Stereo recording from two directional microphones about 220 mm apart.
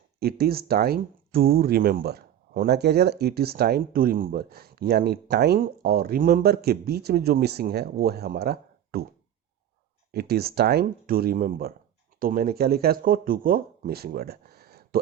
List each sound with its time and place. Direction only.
0.2 s speech: 45° right (ahead or behind)
10.1 s speech: 45° right (ahead or behind)